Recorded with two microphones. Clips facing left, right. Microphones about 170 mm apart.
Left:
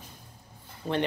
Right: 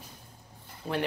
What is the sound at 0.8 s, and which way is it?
Speech, 5° right (ahead or behind).